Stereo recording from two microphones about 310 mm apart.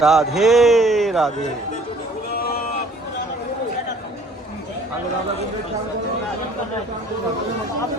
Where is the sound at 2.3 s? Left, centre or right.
Left.